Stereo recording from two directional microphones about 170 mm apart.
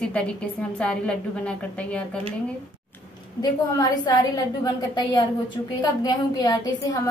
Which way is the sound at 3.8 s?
20° left (ahead or behind).